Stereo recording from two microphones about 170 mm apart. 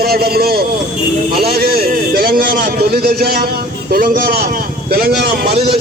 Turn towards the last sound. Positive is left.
turn(degrees=-60)  # may be behind; listen again after turning